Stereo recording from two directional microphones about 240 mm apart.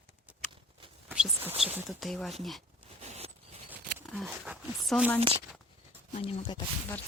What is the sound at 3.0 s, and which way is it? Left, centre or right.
Zipper, right.